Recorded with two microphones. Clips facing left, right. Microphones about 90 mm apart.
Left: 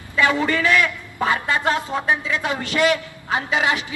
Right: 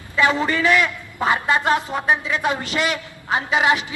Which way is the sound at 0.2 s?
20° right (ahead or behind).